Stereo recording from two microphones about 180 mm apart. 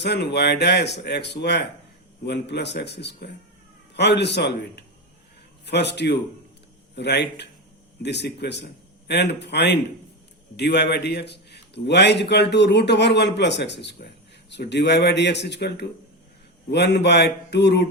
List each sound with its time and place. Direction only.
0.0 s a man's voice: 70° left (ahead or behind)